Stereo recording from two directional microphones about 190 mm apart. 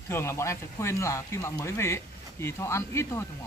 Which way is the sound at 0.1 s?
15° left (ahead or behind).